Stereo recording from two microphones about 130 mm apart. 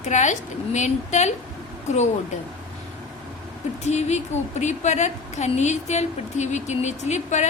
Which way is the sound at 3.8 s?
60° left (ahead or behind).